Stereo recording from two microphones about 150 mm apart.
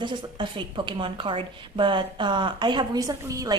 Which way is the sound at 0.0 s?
30° right (ahead or behind).